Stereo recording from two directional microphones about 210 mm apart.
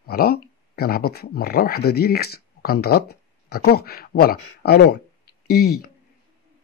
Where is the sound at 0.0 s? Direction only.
45° left (ahead or behind).